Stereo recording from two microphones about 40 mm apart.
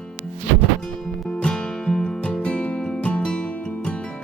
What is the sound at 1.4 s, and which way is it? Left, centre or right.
Music, centre.